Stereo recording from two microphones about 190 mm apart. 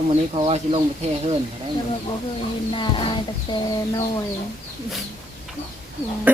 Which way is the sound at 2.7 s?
25° left (ahead or behind).